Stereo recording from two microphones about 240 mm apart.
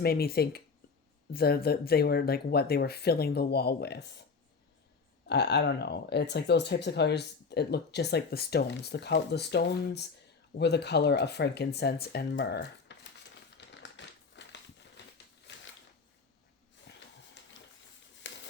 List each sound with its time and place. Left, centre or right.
0.0 s speech: left
5.3 s speech: left
13.6 s crumpling: left
15.5 s a sound: left
16.9 s snort: left
18.3 s a sound: left